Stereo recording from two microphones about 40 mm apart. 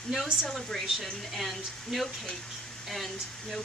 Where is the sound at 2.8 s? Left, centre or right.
Centre.